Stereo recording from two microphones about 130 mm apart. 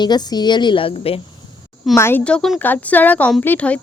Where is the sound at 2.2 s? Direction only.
5° left (ahead or behind).